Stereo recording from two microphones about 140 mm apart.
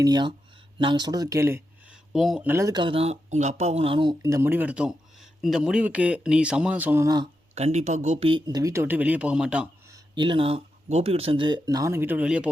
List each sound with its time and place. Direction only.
0.0 s speech: 30° right (ahead or behind)
1.9 s a sound: centre (ahead or behind)
2.4 s speech: 15° right (ahead or behind)
2.6 s speech: 35° right (ahead or behind)
4.2 s speech: 20° right (ahead or behind)
7.5 s speech: 50° right (ahead or behind)
8.3 s speech: 30° right (ahead or behind); by 9.6 s 5° right (ahead or behind)
9.9 s speech: 35° right (ahead or behind); by 12.5 s 5° right (ahead or behind)